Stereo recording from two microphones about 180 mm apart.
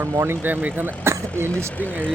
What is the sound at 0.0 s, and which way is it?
Speech, 15° right (ahead or behind).